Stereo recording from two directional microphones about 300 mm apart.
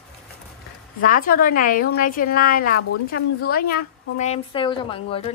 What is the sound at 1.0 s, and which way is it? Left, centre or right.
Speech, left.